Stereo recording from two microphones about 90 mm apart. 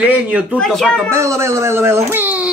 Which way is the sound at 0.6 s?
5° left (ahead or behind).